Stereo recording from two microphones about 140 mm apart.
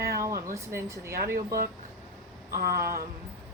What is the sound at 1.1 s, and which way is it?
Speech, 90° right.